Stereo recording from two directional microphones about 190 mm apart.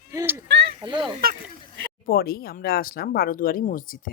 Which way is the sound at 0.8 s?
25° right (ahead or behind).